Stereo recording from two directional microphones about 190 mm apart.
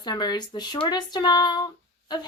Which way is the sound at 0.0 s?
20° left (ahead or behind).